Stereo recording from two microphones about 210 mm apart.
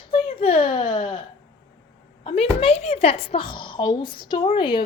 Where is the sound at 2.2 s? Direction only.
30° left (ahead or behind).